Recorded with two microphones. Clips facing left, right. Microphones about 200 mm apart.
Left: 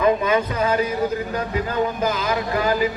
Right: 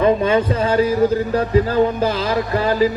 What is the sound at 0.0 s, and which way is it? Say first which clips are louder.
Speech: right 3 dB; 30° right (ahead or behind).